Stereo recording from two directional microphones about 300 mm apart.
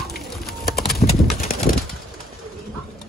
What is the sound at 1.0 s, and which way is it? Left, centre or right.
Clip-clop, left.